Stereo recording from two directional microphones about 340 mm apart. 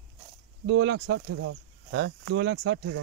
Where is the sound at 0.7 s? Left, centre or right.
Right.